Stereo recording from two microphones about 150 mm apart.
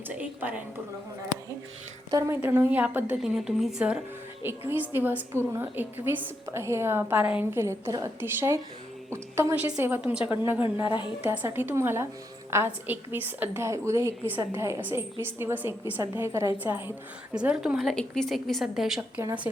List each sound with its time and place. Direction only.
0.2 s a woman's voice: 10° right (ahead or behind)
2.0 s a woman's voice: 20° right (ahead or behind)
10.8 s a woman's voice: 30° left (ahead or behind)
11.3 s a woman's voice: 15° right (ahead or behind)